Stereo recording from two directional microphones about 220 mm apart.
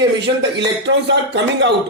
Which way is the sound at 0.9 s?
60° right (ahead or behind).